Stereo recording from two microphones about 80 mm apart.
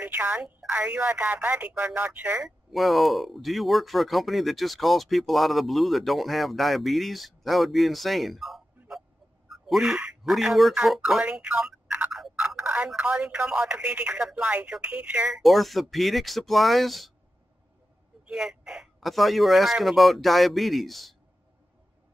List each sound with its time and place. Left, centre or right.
0.0 s telephone: right
0.7 s speech: centre
2.4 s speech: centre
15.4 s speech: centre
18.2 s speech: centre